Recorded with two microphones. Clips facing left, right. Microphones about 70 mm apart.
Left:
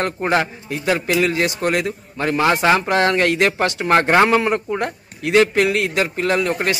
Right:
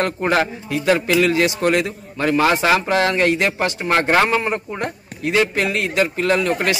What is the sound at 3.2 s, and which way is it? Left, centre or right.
Speech, left.